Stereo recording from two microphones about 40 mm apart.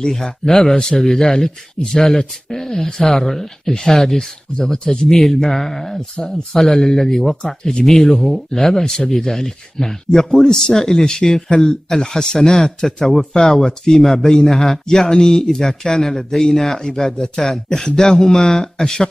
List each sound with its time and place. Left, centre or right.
0.0 s speech: centre
4.7 s speech: left
5.1 s speech: centre